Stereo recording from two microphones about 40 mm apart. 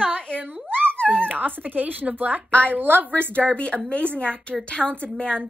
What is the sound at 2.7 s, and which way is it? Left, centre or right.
Speech, right.